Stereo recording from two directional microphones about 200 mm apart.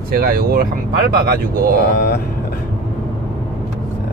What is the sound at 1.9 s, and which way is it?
Speech, 50° left (ahead or behind).